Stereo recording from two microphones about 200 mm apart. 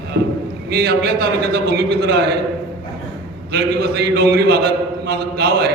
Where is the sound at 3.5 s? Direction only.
55° right (ahead or behind).